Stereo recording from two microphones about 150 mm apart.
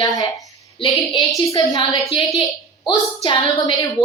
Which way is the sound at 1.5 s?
25° left (ahead or behind).